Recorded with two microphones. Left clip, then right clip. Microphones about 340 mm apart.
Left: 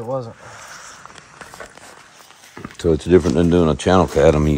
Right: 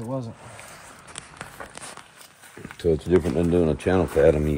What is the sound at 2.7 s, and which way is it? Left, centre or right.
Speech, left.